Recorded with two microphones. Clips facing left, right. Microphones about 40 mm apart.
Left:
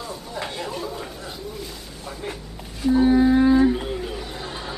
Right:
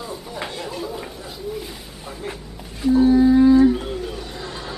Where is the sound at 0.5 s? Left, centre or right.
Centre.